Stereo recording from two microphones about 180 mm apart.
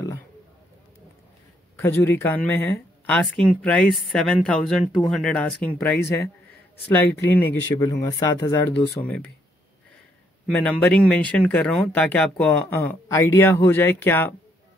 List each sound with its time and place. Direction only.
1.8 s speech: 15° left (ahead or behind)
10.5 s speech: 5° left (ahead or behind)